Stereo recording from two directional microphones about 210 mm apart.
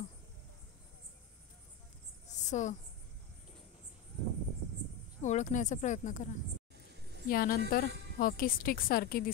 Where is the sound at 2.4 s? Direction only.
35° left (ahead or behind).